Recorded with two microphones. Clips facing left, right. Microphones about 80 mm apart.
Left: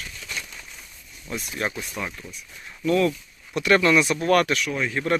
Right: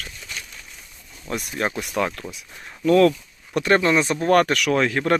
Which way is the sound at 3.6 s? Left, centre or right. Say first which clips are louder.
Even; right.